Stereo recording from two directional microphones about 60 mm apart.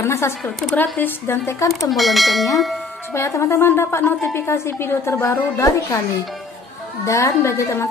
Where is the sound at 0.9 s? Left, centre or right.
Left.